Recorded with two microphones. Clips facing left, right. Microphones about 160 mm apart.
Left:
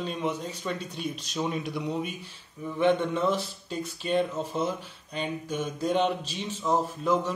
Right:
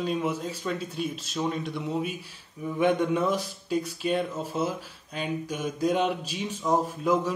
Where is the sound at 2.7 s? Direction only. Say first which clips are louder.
Right 1 dB; 10° right (ahead or behind).